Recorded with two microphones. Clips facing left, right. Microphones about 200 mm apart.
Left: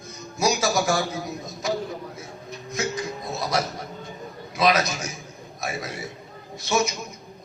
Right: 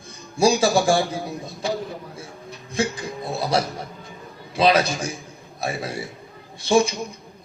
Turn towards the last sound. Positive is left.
turn(degrees=-30)  # may be behind; listen again after turning